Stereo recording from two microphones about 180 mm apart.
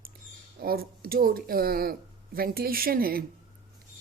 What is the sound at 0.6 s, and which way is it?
Speech, 55° right (ahead or behind).